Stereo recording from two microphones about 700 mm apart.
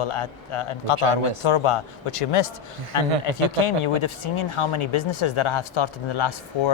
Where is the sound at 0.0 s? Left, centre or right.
Left.